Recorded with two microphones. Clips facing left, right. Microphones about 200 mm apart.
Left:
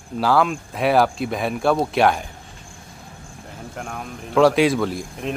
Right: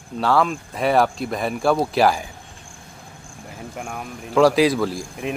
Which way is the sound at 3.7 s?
5° right (ahead or behind).